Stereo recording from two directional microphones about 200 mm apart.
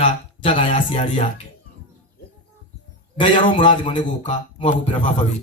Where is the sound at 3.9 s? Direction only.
35° left (ahead or behind).